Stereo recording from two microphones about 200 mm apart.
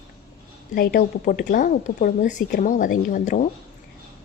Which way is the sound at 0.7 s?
50° left (ahead or behind).